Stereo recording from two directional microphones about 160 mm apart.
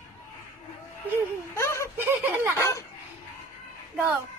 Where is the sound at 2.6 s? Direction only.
20° left (ahead or behind).